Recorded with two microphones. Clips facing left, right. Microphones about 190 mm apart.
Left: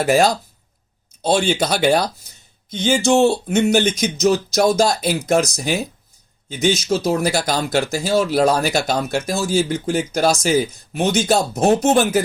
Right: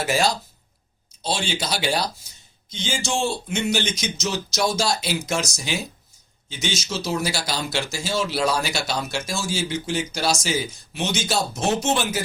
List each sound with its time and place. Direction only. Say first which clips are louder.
0.0 s speech: left 7 dB; 50° left (ahead or behind)
11.2 s speech: left 8 dB; 35° left (ahead or behind)